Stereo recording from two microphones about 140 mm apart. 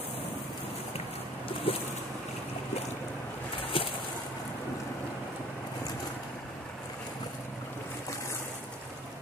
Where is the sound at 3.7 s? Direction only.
40° left (ahead or behind).